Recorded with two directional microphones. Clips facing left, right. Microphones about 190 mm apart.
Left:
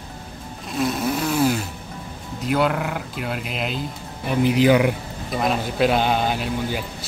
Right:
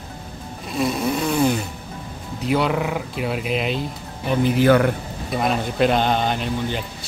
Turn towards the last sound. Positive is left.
turn(degrees=5)  # may be behind; listen again after turning